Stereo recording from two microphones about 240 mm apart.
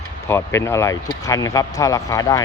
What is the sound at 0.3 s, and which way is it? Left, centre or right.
Speech, centre.